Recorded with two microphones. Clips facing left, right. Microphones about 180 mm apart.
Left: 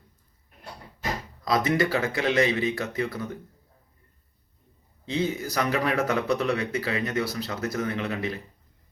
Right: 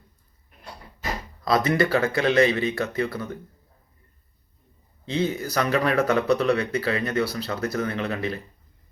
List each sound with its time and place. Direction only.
1.5 s speech: 15° left (ahead or behind)
5.0 s speech: 15° left (ahead or behind)